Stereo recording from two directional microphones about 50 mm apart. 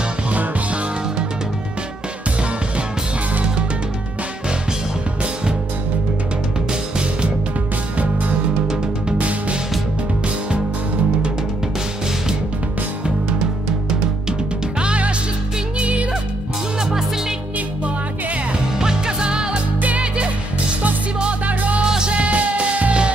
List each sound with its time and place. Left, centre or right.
6.7 s music: centre
8.0 s music: right
14.8 s music: right
18.8 s music: centre
19.8 s music: right
21.2 s music: right
21.8 s music: centre
22.1 s music: right